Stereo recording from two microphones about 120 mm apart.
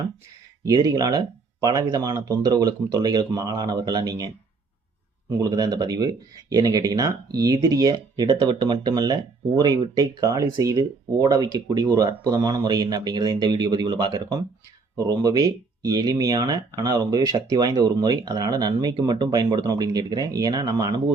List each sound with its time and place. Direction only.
0.6 s speech: 30° right (ahead or behind)
5.4 s speech: 35° right (ahead or behind)